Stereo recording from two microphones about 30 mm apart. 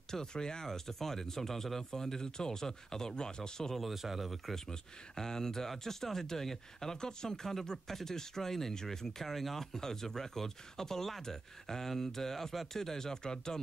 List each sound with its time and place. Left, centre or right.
0.1 s speech: left
0.7 s speech: centre
3.7 s speech: centre
4.6 s speech: centre